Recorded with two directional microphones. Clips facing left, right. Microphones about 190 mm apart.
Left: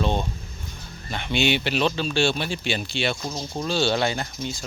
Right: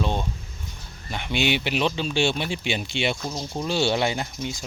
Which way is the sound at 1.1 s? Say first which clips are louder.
Left 1 dB; 10° right (ahead or behind).